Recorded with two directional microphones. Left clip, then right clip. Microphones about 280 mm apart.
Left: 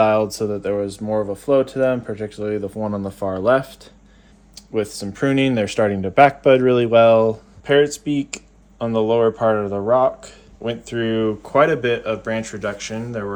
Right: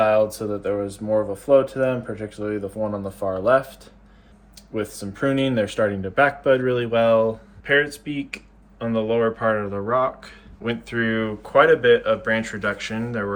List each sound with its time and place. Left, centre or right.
0.3 s speech: left; by 13.3 s centre